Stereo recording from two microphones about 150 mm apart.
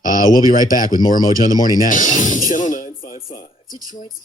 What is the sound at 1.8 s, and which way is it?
Speech, 55° left (ahead or behind).